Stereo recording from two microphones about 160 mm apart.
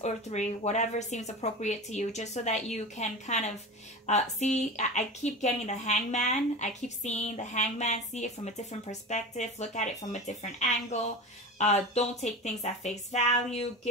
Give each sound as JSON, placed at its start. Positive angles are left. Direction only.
{"t": 0.0, "sound": "a woman's voice", "side_deg": 45}